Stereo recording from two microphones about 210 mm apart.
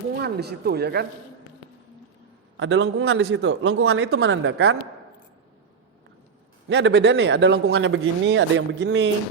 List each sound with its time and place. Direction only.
0.2 s speech: 50° right (ahead or behind)
2.6 s speech: 60° right (ahead or behind)
6.7 s speech: 60° right (ahead or behind)